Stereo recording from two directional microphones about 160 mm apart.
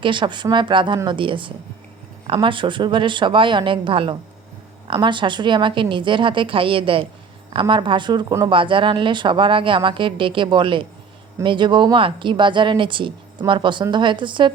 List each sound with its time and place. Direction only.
0.0 s speech: 30° right (ahead or behind)